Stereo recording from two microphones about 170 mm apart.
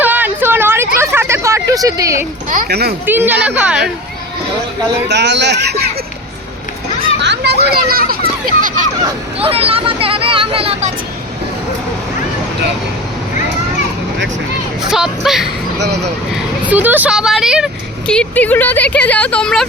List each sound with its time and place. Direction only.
0.0 s a sound: 10° right (ahead or behind)
2.5 s speech: 60° right (ahead or behind)
3.1 s a woman's voice: 10° right (ahead or behind)
5.0 s speech: 90° right
7.2 s a child's voice: 80° right; by 8.9 s 50° right (ahead or behind)
9.4 s speech: 35° right (ahead or behind)
14.8 s speech: 5° right (ahead or behind)